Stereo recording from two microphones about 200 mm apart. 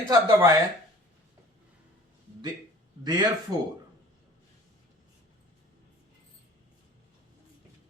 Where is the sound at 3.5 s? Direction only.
20° right (ahead or behind).